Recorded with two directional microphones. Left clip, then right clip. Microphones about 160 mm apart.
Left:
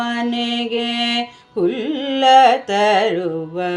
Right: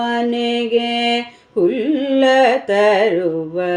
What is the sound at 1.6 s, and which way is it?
Carnatic music, 10° right (ahead or behind).